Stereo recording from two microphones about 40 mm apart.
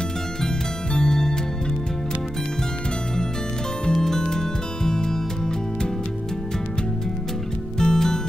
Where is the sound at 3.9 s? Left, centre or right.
Centre.